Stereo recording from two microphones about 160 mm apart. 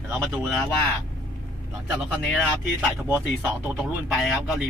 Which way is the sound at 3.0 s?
15° right (ahead or behind).